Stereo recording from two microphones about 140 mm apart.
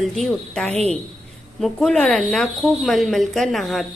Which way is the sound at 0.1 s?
5° left (ahead or behind).